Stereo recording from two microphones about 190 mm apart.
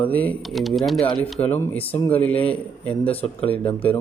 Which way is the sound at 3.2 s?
30° left (ahead or behind).